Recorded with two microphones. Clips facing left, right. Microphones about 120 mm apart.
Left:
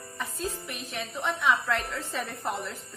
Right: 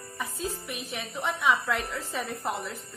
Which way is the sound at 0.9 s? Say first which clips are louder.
Left 1 dB; 5° right (ahead or behind).